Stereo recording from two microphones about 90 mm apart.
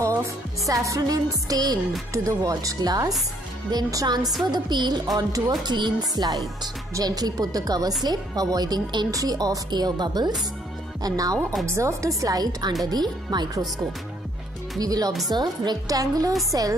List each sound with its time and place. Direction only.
0.0 s music: 35° right (ahead or behind)
2.1 s a woman's voice: 40° right (ahead or behind)
4.5 s a woman's voice: 55° right (ahead or behind)
14.8 s speech: 45° right (ahead or behind)